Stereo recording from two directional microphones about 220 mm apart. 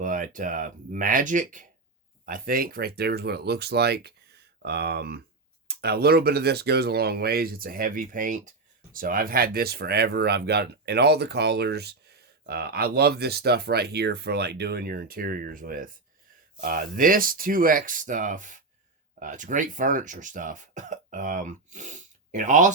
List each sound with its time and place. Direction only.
0.0 s speech: 35° right (ahead or behind)